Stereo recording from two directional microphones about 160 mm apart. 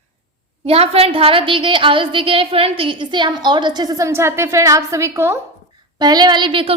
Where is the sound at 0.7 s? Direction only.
40° right (ahead or behind).